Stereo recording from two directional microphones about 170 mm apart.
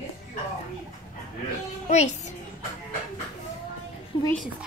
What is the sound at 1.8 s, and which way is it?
Music, 45° left (ahead or behind).